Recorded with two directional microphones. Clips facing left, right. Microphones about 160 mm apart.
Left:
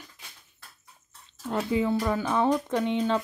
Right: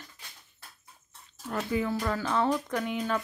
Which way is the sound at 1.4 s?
20° left (ahead or behind).